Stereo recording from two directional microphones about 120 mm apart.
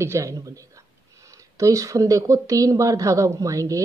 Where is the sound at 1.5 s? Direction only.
25° right (ahead or behind).